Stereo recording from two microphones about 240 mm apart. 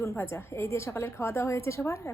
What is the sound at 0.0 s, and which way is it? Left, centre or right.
A woman's voice, centre.